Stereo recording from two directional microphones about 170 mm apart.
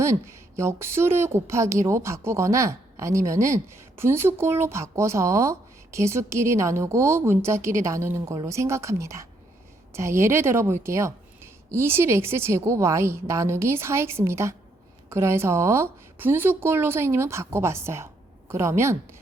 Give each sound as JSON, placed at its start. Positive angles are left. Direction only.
{"t": 0.0, "sound": "a woman's voice", "side_deg": -15}